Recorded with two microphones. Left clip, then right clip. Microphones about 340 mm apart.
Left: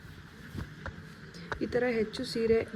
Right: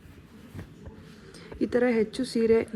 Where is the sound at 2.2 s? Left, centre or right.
Centre.